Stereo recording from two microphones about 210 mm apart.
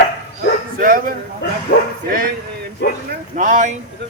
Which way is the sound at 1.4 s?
55° left (ahead or behind).